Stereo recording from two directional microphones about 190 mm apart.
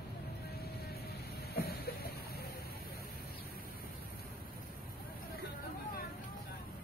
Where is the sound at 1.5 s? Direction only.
55° left (ahead or behind).